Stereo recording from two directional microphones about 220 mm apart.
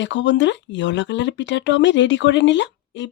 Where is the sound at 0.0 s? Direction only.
55° left (ahead or behind).